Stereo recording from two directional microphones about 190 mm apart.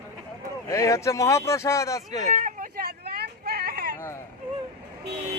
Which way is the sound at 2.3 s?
45° right (ahead or behind).